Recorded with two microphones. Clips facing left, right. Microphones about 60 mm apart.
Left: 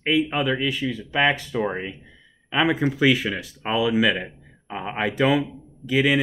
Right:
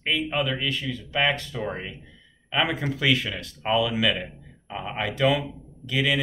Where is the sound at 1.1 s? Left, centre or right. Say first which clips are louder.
Left 3 dB; left.